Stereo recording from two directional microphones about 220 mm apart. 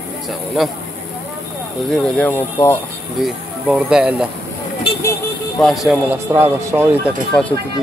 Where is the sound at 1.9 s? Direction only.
5° left (ahead or behind).